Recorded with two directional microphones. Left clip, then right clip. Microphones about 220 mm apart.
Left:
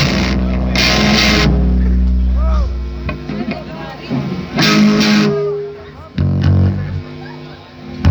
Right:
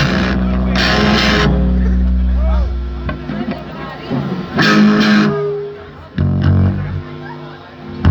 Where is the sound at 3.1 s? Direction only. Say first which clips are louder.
Even; 50° left (ahead or behind).